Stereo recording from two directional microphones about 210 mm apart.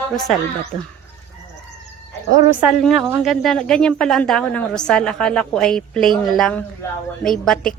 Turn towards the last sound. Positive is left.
turn(degrees=5)  # may be behind; listen again after turning